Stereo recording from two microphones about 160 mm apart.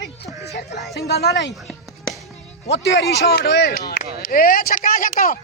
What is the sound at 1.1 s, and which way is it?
Speech, 90° left.